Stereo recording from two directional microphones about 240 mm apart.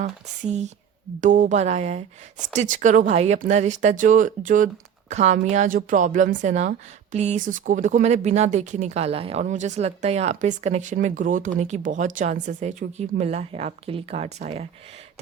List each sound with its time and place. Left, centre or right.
0.0 s speech: right